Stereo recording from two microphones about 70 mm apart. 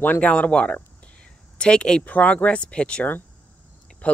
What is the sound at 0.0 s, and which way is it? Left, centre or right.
Speech, left.